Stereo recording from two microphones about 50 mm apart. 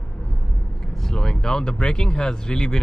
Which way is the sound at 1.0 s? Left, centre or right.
Centre.